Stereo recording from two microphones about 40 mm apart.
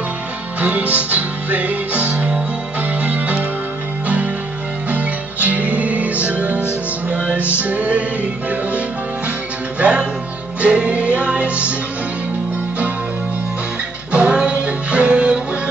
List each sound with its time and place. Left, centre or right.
0.6 s music: right
4.9 s music: right
14.1 s music: right